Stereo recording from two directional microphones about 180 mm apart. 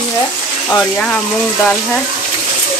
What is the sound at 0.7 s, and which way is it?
Speech, 5° left (ahead or behind).